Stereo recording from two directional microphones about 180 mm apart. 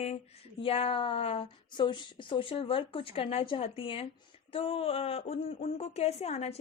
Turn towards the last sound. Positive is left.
turn(degrees=35)  # may be behind; listen again after turning